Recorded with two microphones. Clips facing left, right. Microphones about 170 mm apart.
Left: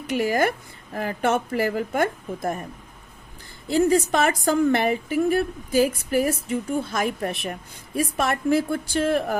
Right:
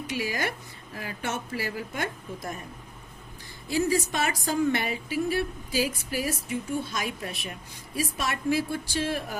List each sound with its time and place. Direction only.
0.1 s a woman's voice: 55° left (ahead or behind)
3.7 s a woman's voice: 55° left (ahead or behind)